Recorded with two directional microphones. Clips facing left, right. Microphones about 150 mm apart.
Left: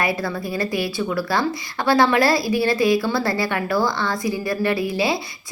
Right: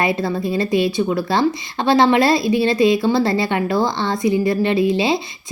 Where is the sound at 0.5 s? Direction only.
25° right (ahead or behind).